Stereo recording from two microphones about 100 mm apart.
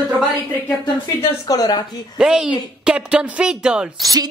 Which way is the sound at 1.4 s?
40° left (ahead or behind).